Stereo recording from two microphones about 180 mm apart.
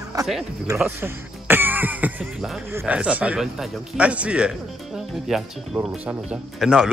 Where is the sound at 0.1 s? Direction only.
20° right (ahead or behind).